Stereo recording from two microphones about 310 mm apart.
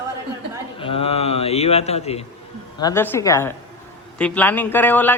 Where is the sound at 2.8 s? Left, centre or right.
Centre.